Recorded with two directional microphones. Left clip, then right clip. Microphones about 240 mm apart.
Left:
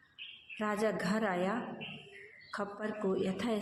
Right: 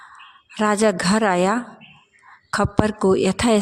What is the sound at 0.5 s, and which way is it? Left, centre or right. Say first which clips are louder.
A woman's voice: right 15 dB; right.